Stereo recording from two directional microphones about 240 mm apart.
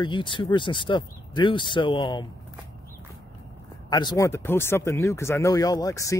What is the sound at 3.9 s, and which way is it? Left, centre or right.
Speech, centre.